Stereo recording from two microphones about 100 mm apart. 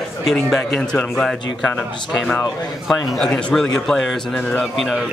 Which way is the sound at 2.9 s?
5° left (ahead or behind).